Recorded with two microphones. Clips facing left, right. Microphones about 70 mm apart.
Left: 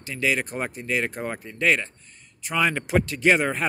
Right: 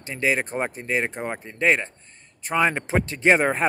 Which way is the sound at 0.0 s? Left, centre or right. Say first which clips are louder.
Right 1 dB; right.